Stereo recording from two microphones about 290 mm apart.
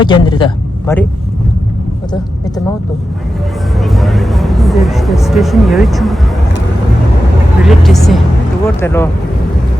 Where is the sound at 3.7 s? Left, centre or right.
Centre.